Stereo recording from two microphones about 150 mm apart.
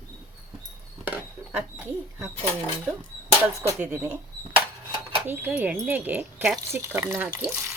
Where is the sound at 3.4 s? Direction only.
15° right (ahead or behind).